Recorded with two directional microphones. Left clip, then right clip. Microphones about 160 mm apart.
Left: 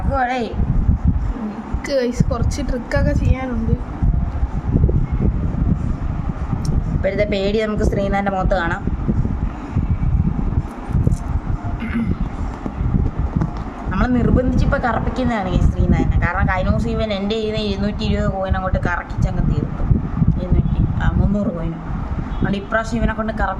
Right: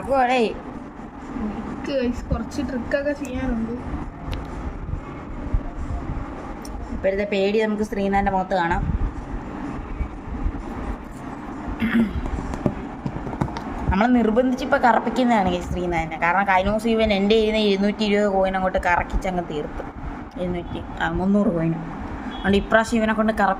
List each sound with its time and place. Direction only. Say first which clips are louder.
0.1 s a woman's voice: right 1 dB; 10° right (ahead or behind)
1.9 s a woman's voice: left 6 dB; 40° left (ahead or behind)
7.0 s a woman's voice: left 2 dB; 15° left (ahead or behind)
11.8 s vehicle: right 4 dB; 10° right (ahead or behind)
13.9 s a woman's voice: right 1 dB; 10° right (ahead or behind)
22.4 s a woman's voice: right 3 dB; 25° right (ahead or behind)